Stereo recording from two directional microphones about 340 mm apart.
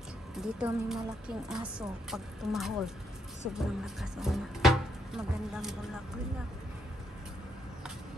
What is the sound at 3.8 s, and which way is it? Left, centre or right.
Speech, centre.